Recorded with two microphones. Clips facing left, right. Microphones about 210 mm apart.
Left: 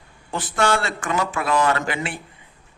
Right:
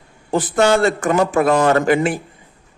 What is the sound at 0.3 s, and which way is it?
A man's voice, 40° right (ahead or behind).